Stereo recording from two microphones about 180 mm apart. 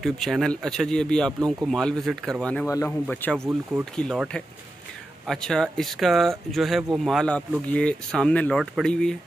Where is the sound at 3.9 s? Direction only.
5° left (ahead or behind).